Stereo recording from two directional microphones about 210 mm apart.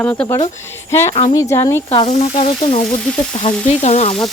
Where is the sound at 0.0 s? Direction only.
10° left (ahead or behind).